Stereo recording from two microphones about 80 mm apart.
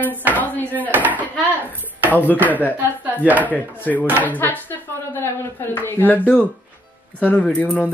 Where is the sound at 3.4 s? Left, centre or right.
Left.